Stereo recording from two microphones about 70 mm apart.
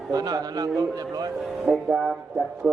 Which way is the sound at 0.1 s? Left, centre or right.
Right.